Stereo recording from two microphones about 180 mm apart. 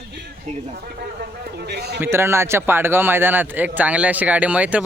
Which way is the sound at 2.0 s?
15° right (ahead or behind).